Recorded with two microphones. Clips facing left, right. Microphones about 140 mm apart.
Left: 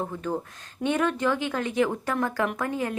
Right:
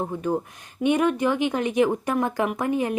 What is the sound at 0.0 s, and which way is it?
Speech, 20° right (ahead or behind).